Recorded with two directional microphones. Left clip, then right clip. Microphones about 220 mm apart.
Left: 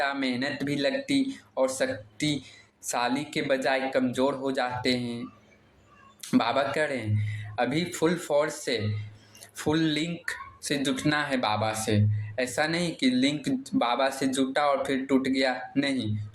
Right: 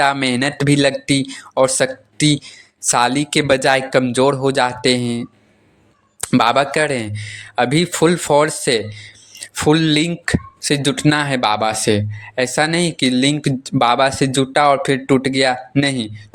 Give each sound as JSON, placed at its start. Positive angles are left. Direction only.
{"t": 0.0, "sound": "speech", "side_deg": -50}
{"t": 6.3, "sound": "speech", "side_deg": -45}